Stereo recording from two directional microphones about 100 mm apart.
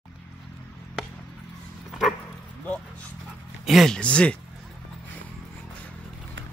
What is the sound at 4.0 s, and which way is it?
Speech, 10° left (ahead or behind).